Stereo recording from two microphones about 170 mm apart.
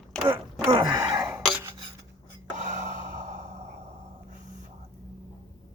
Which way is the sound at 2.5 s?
45° right (ahead or behind).